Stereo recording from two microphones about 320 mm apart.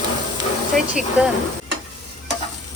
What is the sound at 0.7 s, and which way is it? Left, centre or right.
Speech, centre.